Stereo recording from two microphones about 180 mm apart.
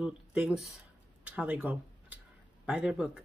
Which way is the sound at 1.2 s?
5° right (ahead or behind).